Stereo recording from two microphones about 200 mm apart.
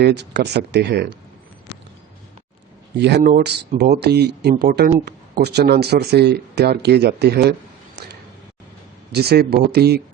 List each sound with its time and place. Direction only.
0.0 s speech: 55° right (ahead or behind)
3.0 s speech: 55° right (ahead or behind)
9.1 s speech: 55° right (ahead or behind)